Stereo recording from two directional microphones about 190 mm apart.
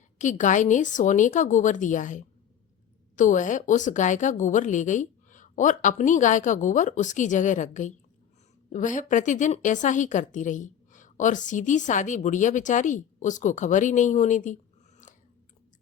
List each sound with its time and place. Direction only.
0.2 s a woman's voice: 40° left (ahead or behind)